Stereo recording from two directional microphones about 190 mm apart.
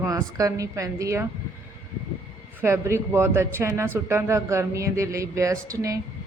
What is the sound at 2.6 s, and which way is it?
A woman's voice, 15° right (ahead or behind).